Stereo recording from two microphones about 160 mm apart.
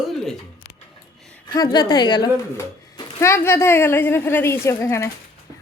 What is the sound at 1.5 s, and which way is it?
A woman's voice, 25° left (ahead or behind).